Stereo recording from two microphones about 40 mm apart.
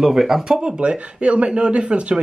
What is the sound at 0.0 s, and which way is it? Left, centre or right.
Speech, centre.